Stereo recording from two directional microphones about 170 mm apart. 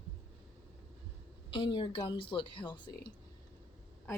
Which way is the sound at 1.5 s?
30° left (ahead or behind).